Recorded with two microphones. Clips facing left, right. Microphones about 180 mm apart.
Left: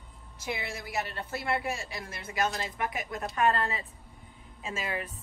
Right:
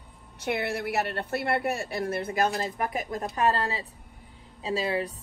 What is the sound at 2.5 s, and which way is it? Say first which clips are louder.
A woman's voice: right 4 dB; 40° right (ahead or behind).